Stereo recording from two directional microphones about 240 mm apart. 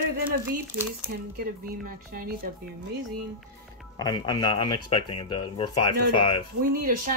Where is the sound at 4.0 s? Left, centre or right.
Centre.